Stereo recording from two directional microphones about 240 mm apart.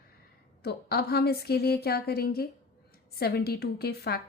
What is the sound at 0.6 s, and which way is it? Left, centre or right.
A woman's voice, left.